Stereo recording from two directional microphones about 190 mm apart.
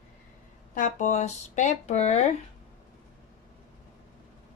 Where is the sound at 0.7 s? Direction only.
40° left (ahead or behind).